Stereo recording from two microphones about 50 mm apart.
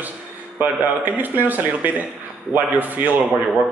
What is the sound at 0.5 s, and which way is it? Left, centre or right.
Speech, right.